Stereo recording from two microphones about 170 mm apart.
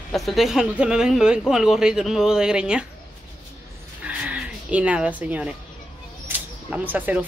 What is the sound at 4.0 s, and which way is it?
Music, 5° right (ahead or behind).